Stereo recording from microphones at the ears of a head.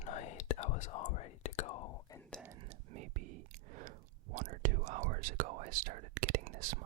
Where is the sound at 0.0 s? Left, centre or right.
Left.